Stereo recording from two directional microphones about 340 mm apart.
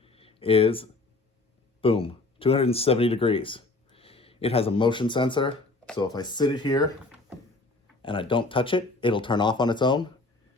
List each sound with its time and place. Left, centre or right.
0.0 s a sound: centre
1.8 s speech: centre
8.0 s speech: centre